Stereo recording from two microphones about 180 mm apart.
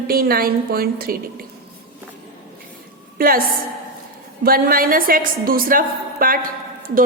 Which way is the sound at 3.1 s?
55° right (ahead or behind).